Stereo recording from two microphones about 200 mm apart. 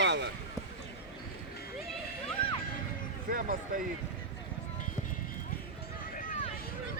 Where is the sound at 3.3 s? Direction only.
45° right (ahead or behind).